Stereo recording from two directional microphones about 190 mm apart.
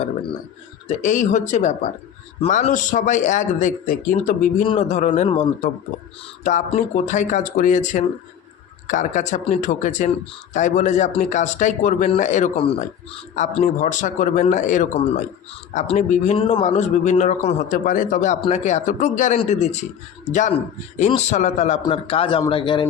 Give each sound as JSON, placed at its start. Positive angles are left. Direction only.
{"t": 0.9, "sound": "a man's voice", "side_deg": 40}
{"t": 4.6, "sound": "a man's voice", "side_deg": 30}
{"t": 13.6, "sound": "a man's voice", "side_deg": 40}
{"t": 21.1, "sound": "a man's voice", "side_deg": 35}